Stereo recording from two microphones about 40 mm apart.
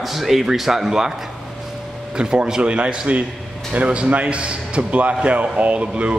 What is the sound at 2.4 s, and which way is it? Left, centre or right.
A man's voice, right.